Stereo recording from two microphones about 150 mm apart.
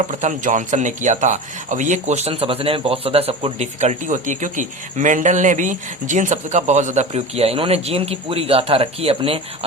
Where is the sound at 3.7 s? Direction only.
55° right (ahead or behind).